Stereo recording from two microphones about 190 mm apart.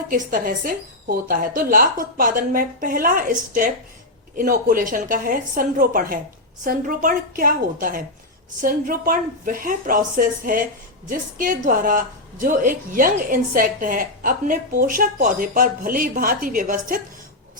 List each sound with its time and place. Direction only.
0.1 s a woman's voice: 45° right (ahead or behind)